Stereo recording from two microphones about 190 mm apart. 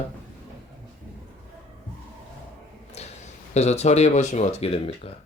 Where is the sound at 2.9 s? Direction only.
35° left (ahead or behind).